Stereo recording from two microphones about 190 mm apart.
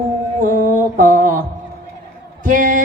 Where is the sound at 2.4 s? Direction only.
45° right (ahead or behind).